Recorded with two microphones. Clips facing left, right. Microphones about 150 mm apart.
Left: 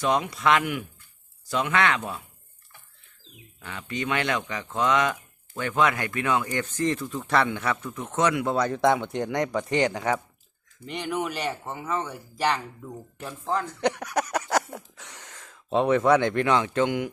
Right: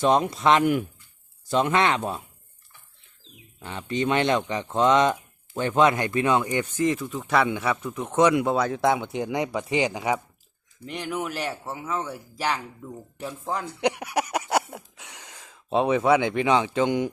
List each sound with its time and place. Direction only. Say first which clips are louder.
0.0 s speech: right 3 dB; 25° right (ahead or behind)
0.6 s speech: right 8 dB; 35° right (ahead or behind)
1.5 s speech: right 3 dB; 25° right (ahead or behind)
3.6 s speech: right 5 dB; 25° right (ahead or behind)
8.5 s speech: even; 5° right (ahead or behind)
13.4 s speech: left 1 dB; 10° right (ahead or behind)